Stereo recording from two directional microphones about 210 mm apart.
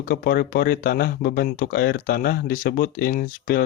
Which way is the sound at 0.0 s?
45° left (ahead or behind).